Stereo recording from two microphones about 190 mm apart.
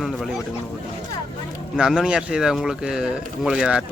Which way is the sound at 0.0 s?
Centre (ahead or behind).